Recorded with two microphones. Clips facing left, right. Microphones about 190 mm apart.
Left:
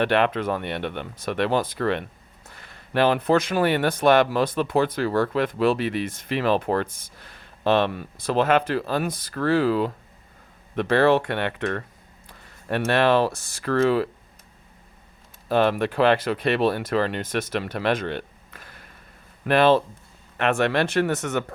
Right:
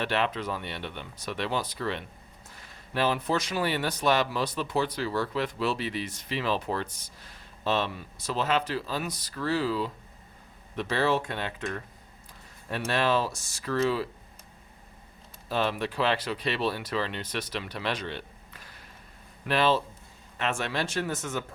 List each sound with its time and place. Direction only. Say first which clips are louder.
0.0 s speech: left 8 dB; 60° left (ahead or behind)
15.4 s speech: left 8 dB; 55° left (ahead or behind)